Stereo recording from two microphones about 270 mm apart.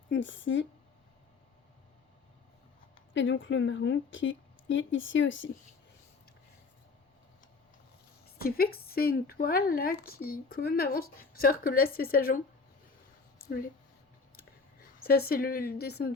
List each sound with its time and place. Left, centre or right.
0.1 s a woman's voice: left
3.1 s a woman's voice: left
8.4 s speech: left
13.4 s a sound: left
14.8 s a woman's voice: left